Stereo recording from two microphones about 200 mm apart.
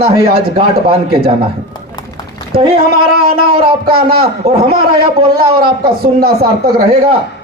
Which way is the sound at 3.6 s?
25° right (ahead or behind).